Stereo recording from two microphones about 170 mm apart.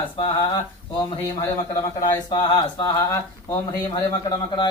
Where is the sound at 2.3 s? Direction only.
25° left (ahead or behind).